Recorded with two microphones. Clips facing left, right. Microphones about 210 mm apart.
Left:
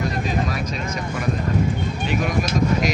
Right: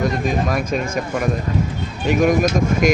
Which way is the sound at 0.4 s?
50° right (ahead or behind).